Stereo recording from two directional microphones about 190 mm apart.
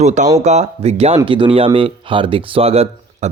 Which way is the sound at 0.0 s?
40° right (ahead or behind).